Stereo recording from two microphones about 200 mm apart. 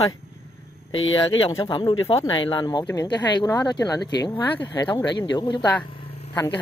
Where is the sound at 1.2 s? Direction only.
25° left (ahead or behind).